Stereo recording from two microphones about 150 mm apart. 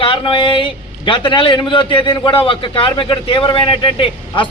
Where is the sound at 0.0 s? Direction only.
35° left (ahead or behind).